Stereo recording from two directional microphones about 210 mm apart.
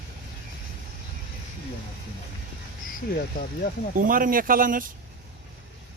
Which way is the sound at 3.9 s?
40° right (ahead or behind).